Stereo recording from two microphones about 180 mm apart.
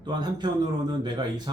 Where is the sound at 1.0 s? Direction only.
25° right (ahead or behind).